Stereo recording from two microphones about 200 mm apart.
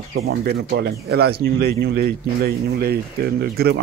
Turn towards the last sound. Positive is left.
turn(degrees=-50)  # may be behind; listen again after turning